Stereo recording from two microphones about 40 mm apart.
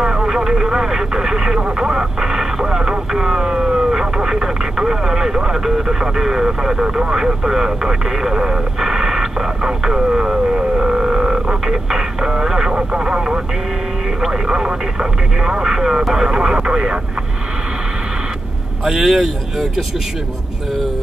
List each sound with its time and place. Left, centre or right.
0.0 s speech: centre
11.6 s speech: centre
12.7 s speech: right
18.9 s speech: centre